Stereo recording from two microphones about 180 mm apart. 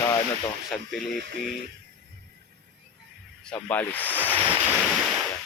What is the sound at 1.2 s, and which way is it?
Speech, 55° right (ahead or behind).